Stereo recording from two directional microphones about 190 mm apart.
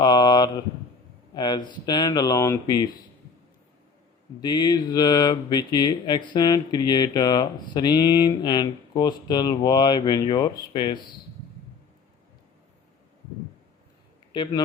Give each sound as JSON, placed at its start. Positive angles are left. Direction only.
{"t": 0.0, "sound": "a sound", "side_deg": 20}
{"t": 1.3, "sound": "speech", "side_deg": 25}
{"t": 4.4, "sound": "speech", "side_deg": 20}